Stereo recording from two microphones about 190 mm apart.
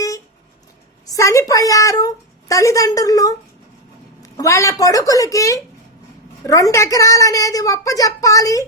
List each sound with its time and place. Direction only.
1.0 s a woman's voice: 15° left (ahead or behind)